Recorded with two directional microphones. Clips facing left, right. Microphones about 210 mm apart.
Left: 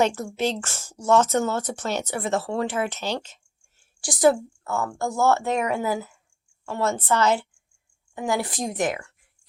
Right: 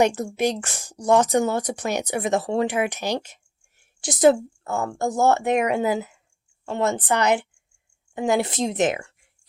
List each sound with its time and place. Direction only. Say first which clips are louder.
0.0 s speech: right 3 dB; 15° right (ahead or behind)
3.8 s a sound: right 3 dB; 20° right (ahead or behind)
4.6 s a woman's voice: right 2 dB; 15° right (ahead or behind)